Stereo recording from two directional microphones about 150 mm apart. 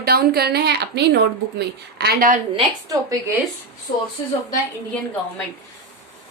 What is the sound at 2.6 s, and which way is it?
Speech, 25° right (ahead or behind).